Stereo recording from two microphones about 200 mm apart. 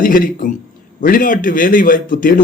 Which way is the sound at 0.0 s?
45° left (ahead or behind).